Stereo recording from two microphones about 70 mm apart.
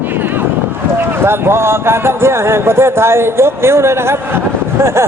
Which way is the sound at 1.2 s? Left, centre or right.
Right.